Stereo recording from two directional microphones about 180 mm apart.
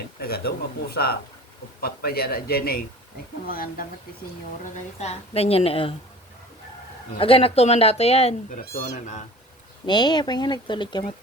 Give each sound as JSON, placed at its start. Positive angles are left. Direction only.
{"t": 0.2, "sound": "a man's voice", "side_deg": 60}
{"t": 4.6, "sound": "speech", "side_deg": 35}
{"t": 7.2, "sound": "speech", "side_deg": 30}
{"t": 8.5, "sound": "speech", "side_deg": 50}
{"t": 9.8, "sound": "speech", "side_deg": 25}